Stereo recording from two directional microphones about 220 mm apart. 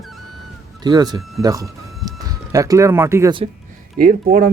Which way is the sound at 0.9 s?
20° right (ahead or behind).